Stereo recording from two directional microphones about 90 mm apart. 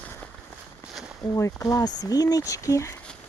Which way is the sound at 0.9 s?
5° right (ahead or behind).